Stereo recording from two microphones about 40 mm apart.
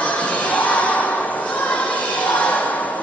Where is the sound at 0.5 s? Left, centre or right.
Left.